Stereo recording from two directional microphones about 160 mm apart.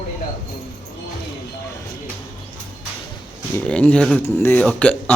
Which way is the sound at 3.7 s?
5° left (ahead or behind).